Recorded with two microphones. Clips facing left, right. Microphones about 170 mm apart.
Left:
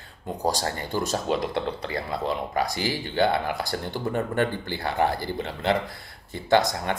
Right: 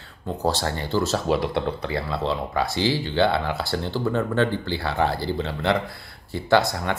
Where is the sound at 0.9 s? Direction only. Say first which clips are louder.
Right 5 dB; 15° left (ahead or behind).